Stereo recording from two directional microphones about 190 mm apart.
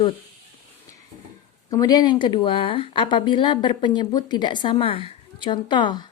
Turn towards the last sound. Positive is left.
turn(degrees=25)  # may be behind; listen again after turning